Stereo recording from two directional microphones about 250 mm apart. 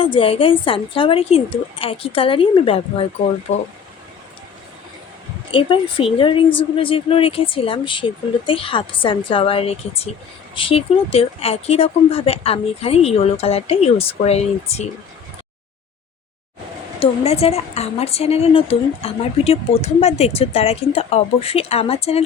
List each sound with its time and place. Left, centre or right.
0.0 s a woman's voice: left
5.5 s a woman's voice: left
17.0 s a woman's voice: left